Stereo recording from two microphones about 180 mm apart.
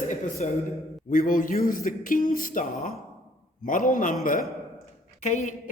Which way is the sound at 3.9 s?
45° left (ahead or behind).